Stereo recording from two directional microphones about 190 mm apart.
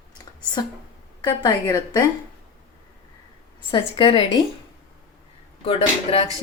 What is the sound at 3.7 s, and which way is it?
Speech, 25° left (ahead or behind).